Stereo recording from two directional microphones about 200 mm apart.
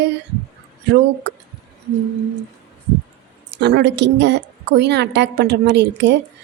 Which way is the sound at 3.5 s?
60° right (ahead or behind).